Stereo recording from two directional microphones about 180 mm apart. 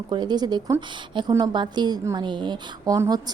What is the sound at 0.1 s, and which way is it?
A woman's voice, 25° right (ahead or behind).